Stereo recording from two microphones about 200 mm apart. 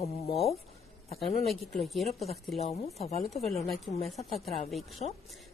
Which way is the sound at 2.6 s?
30° left (ahead or behind).